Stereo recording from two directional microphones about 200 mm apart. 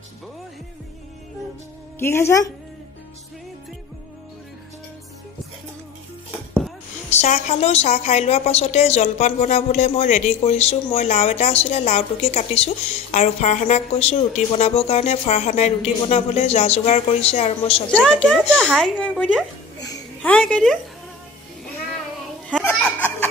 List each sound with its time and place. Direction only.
2.0 s speech: 10° left (ahead or behind)
7.1 s a woman's voice: 35° left (ahead or behind)
17.9 s speech: 5° left (ahead or behind)
19.8 s a sound: 20° left (ahead or behind)
20.2 s speech: 5° left (ahead or behind)
22.5 s children playing: 5° left (ahead or behind)